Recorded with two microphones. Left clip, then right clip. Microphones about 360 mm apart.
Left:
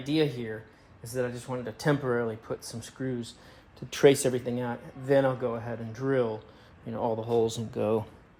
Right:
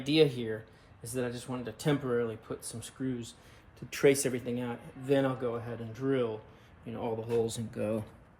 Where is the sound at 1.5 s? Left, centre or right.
Centre.